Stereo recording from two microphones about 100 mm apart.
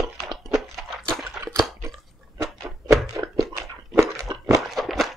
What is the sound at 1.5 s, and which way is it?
Chewing, 5° left (ahead or behind).